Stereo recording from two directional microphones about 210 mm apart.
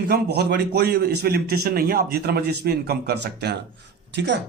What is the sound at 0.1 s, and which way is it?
A man's voice, 50° right (ahead or behind).